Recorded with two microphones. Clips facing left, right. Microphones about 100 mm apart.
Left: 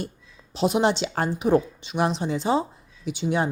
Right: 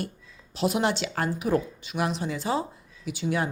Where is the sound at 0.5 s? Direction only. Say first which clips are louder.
Left 4 dB; 25° left (ahead or behind).